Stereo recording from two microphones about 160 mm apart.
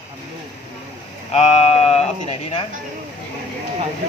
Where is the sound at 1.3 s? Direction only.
40° left (ahead or behind).